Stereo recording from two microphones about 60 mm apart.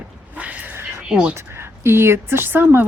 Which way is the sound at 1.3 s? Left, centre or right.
Right.